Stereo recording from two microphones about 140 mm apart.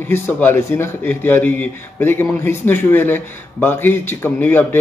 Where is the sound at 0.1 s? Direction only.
15° left (ahead or behind).